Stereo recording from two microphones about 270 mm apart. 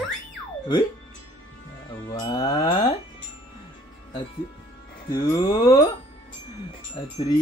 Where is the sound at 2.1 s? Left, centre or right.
Centre.